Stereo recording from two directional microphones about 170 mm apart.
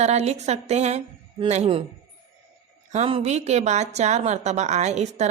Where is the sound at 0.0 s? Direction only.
40° right (ahead or behind).